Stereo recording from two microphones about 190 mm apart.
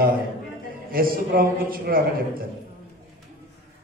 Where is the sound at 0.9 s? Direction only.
50° right (ahead or behind).